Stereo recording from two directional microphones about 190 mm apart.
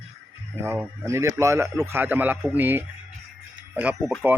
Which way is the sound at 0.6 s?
15° right (ahead or behind).